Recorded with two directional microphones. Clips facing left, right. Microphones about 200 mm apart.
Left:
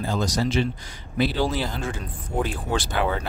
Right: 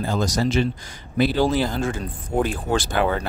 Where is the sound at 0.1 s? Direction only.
50° right (ahead or behind).